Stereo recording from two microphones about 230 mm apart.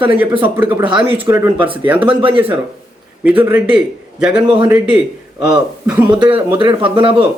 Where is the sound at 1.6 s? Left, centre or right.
Right.